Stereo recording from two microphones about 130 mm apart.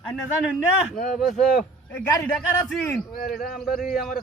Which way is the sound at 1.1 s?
Centre (ahead or behind).